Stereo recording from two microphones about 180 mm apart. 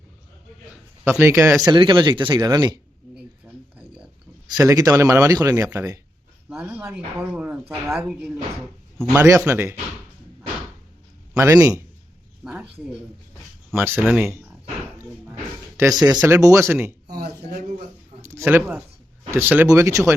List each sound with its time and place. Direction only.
1.0 s speech: 10° right (ahead or behind)
1.6 s speech: 25° right (ahead or behind)
3.4 s a sound: 5° right (ahead or behind)
4.4 s speech: 20° right (ahead or behind)
11.3 s speech: 15° right (ahead or behind)
12.4 s speech: centre (ahead or behind)
13.7 s speech: 15° right (ahead or behind)
16.0 s speech: 20° right (ahead or behind)
17.1 s a sound: 60° right (ahead or behind)
18.2 s speech: 15° right (ahead or behind)